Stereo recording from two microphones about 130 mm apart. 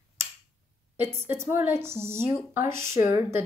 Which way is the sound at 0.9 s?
20° right (ahead or behind).